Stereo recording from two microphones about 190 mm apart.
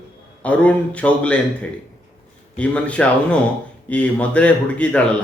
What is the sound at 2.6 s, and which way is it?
Speech, 5° left (ahead or behind).